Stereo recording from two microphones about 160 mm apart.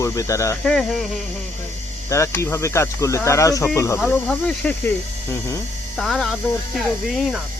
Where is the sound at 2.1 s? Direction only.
20° left (ahead or behind).